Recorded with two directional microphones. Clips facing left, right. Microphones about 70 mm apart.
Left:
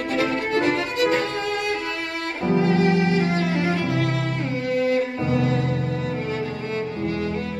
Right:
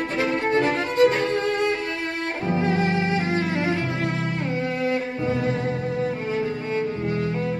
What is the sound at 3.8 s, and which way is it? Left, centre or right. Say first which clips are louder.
Music: left 3 dB; right.